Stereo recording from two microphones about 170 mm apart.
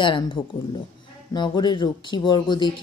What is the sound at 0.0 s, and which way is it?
Speech, 30° left (ahead or behind).